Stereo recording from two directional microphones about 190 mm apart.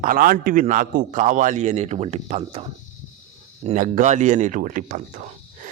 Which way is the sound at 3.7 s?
40° right (ahead or behind).